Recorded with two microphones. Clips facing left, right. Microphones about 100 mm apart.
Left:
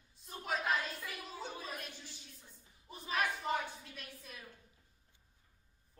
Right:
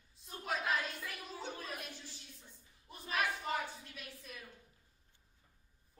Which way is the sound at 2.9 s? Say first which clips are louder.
Left 1 dB; centre (ahead or behind).